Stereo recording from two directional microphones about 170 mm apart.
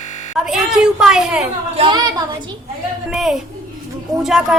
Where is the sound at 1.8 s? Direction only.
25° right (ahead or behind).